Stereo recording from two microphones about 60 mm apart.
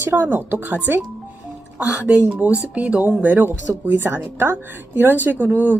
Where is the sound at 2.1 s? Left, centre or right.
Right.